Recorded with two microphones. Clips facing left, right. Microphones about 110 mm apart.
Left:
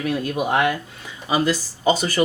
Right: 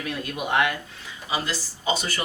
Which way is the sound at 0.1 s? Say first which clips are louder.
Left 4 dB; 35° left (ahead or behind).